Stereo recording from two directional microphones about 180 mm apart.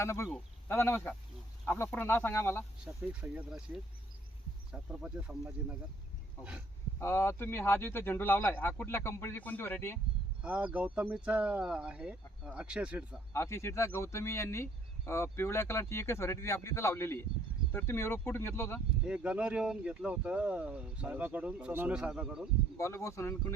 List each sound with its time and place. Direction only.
0.0 s speech: 15° left (ahead or behind)
2.8 s speech: 5° right (ahead or behind)
4.7 s speech: 5° right (ahead or behind)
7.0 s speech: 15° left (ahead or behind)
10.4 s speech: 5° right (ahead or behind)
13.3 s speech: 15° left (ahead or behind)
19.0 s speech: 5° right (ahead or behind)
22.8 s speech: 15° left (ahead or behind)